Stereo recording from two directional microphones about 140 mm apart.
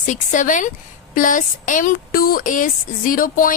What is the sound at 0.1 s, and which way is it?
A woman's voice, 65° left (ahead or behind).